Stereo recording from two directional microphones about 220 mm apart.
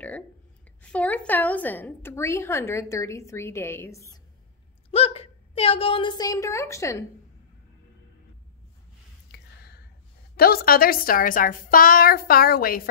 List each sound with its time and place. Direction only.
0.8 s a woman's voice: 5° left (ahead or behind)
4.9 s a woman's voice: 25° left (ahead or behind)
10.3 s a woman's voice: 45° left (ahead or behind)